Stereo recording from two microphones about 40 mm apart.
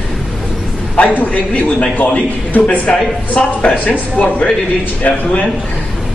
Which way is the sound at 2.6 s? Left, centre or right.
Left.